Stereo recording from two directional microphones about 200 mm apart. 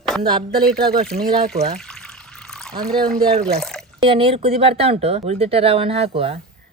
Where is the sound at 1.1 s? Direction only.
35° right (ahead or behind).